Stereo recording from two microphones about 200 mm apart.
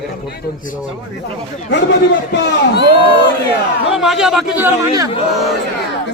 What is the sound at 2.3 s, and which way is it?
Speech, 55° left (ahead or behind).